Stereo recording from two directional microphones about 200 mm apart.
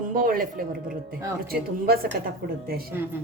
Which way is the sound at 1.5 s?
50° right (ahead or behind).